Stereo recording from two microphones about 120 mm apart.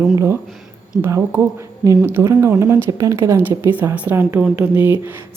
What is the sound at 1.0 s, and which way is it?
A woman's voice, 20° right (ahead or behind).